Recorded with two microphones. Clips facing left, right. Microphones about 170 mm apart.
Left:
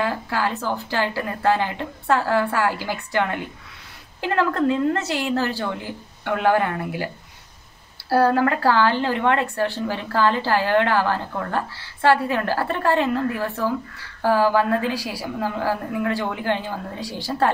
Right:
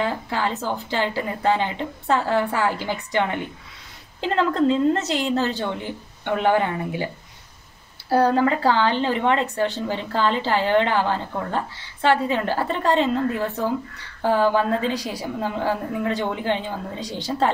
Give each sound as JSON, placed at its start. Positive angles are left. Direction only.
{"t": 0.0, "sound": "a woman's voice", "side_deg": -20}
{"t": 8.1, "sound": "a woman's voice", "side_deg": -20}